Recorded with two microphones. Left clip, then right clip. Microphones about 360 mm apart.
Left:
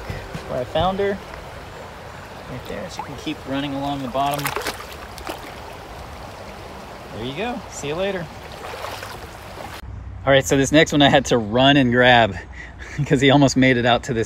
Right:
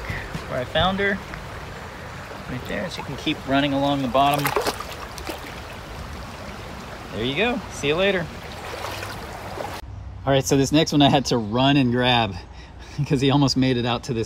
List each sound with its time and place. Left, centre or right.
0.3 s speech: centre
3.3 s speech: centre
7.2 s speech: centre
10.2 s speech: centre